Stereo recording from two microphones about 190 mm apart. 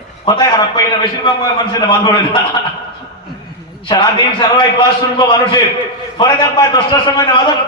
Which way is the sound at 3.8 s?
20° left (ahead or behind).